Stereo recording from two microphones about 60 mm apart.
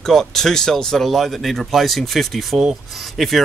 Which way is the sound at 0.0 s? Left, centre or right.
Centre.